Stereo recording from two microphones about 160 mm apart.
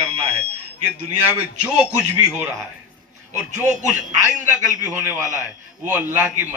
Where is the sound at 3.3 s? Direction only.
50° right (ahead or behind).